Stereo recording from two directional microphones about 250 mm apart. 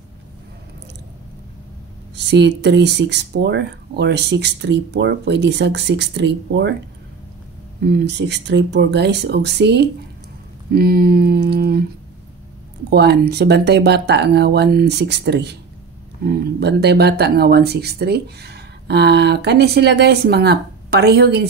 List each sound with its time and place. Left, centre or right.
2.1 s speech: right
7.8 s speech: right
12.9 s speech: right